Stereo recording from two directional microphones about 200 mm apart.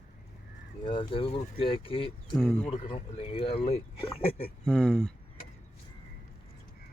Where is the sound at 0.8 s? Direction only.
25° left (ahead or behind).